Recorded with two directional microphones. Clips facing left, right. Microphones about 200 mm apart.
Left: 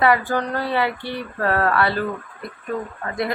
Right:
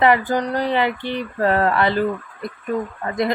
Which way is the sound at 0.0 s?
20° right (ahead or behind).